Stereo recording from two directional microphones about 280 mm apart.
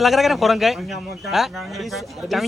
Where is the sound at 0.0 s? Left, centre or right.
Centre.